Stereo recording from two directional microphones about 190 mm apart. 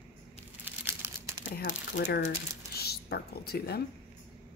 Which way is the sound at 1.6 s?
60° left (ahead or behind).